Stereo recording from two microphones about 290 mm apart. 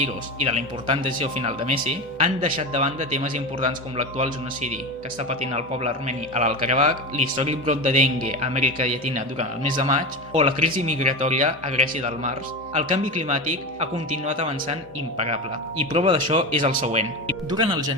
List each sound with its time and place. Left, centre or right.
0.0 s a man's voice: right
15.9 s a man's voice: centre